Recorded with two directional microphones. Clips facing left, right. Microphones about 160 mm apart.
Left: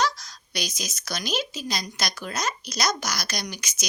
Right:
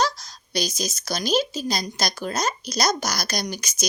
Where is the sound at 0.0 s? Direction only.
30° right (ahead or behind).